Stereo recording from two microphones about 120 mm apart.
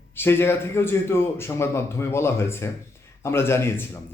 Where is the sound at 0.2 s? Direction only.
20° left (ahead or behind).